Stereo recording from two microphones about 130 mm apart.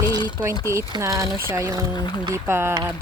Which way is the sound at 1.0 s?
25° right (ahead or behind).